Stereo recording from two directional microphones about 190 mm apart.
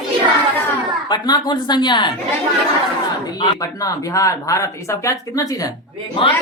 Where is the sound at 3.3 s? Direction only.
20° left (ahead or behind).